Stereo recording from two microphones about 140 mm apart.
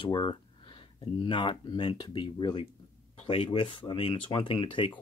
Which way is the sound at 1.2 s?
35° left (ahead or behind).